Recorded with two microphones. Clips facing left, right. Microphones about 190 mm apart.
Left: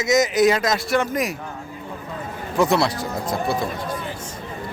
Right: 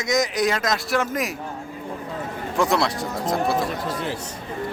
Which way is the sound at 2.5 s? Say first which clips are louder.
Left 3 dB; centre (ahead or behind).